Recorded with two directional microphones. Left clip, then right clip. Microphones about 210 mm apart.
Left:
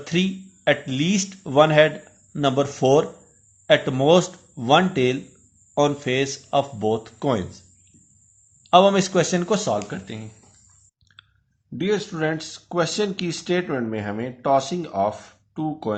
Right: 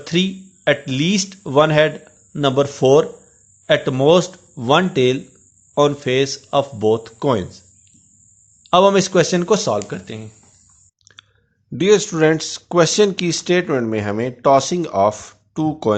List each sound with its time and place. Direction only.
0.0 s speech: 20° right (ahead or behind)
8.6 s speech: 25° right (ahead or behind)
11.0 s clicking: 35° right (ahead or behind)
11.8 s speech: 50° right (ahead or behind)